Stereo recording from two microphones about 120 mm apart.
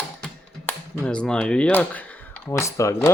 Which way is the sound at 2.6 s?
25° left (ahead or behind).